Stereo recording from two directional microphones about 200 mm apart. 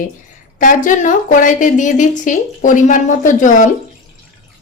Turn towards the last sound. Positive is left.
turn(degrees=40)  # may be behind; listen again after turning